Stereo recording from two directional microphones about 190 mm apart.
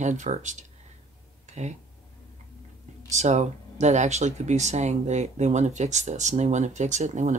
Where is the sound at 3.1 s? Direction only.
35° right (ahead or behind).